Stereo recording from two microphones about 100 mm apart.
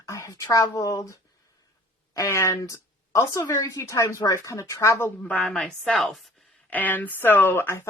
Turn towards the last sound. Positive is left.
turn(degrees=25)  # may be behind; listen again after turning